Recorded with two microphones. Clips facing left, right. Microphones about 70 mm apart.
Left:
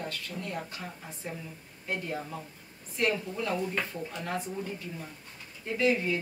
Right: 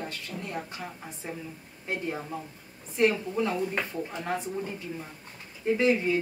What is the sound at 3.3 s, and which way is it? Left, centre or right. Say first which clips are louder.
A woman's voice: right 3 dB; right.